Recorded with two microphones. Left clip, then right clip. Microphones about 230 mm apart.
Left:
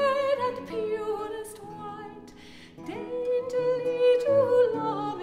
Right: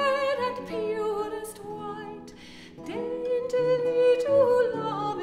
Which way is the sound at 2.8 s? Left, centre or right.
Right.